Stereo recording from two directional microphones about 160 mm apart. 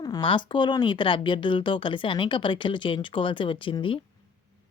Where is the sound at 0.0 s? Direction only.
25° left (ahead or behind).